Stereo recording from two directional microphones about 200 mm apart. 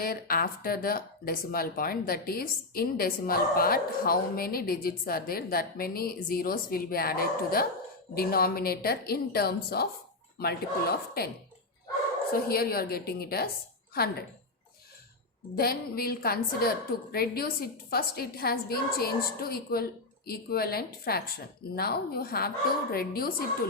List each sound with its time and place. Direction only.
0.0 s speech: 45° left (ahead or behind)
12.5 s speech: 50° left (ahead or behind)
15.5 s speech: 50° left (ahead or behind)